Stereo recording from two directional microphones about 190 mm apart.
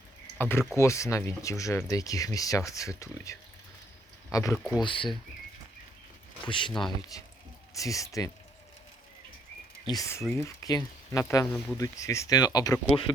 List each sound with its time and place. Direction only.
0.3 s speech: 10° left (ahead or behind); by 5.0 s 25° left (ahead or behind)
6.4 s speech: 25° left (ahead or behind)
6.7 s speech: centre (ahead or behind)
7.1 s speech: 20° left (ahead or behind)
9.8 s speech: 20° left (ahead or behind)